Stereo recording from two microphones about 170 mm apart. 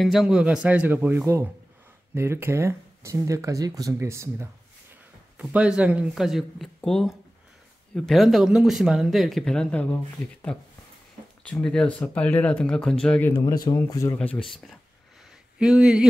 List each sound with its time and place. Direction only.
0.0 s speech: centre (ahead or behind)
5.4 s speech: 5° right (ahead or behind)
13.3 s speech: 20° left (ahead or behind)
14.1 s speech: 5° left (ahead or behind)